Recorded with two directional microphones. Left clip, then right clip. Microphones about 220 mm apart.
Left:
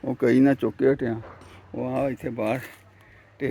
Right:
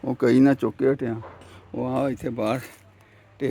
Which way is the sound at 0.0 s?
20° right (ahead or behind).